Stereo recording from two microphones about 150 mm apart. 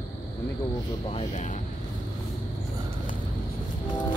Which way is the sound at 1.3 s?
55° left (ahead or behind).